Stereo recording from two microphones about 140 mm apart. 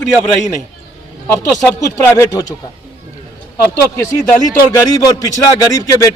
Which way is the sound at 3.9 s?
15° left (ahead or behind).